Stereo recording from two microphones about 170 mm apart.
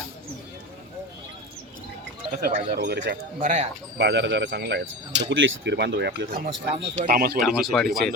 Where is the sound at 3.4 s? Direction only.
40° right (ahead or behind).